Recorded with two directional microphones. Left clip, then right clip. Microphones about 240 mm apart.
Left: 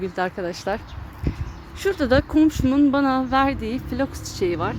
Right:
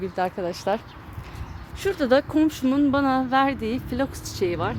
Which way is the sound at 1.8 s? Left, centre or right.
Centre.